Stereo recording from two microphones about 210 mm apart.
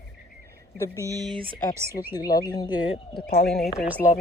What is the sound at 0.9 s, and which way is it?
Speech, 15° right (ahead or behind).